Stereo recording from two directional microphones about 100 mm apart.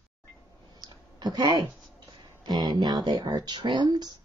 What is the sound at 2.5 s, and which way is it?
Speech, 45° right (ahead or behind).